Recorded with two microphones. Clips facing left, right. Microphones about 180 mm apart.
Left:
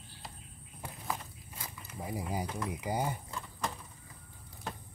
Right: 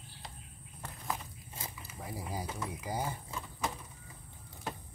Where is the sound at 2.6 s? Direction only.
20° left (ahead or behind).